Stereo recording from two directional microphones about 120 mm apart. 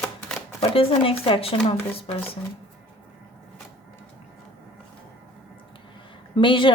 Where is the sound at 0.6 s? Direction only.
50° left (ahead or behind).